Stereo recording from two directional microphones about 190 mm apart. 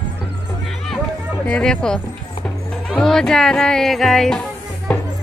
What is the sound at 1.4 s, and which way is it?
Speech, 5° left (ahead or behind).